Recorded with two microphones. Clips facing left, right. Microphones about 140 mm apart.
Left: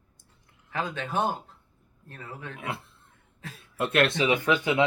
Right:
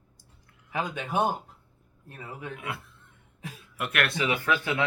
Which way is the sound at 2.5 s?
25° left (ahead or behind).